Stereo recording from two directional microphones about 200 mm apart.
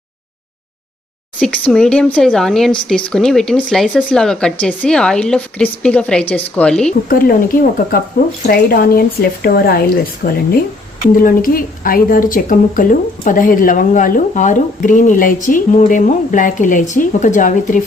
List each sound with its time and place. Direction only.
1.4 s speech: 5° left (ahead or behind)
7.1 s a woman's voice: 45° left (ahead or behind)